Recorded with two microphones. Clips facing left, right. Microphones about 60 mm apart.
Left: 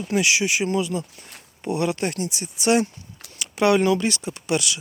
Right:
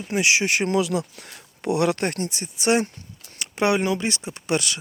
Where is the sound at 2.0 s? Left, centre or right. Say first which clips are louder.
Even; right.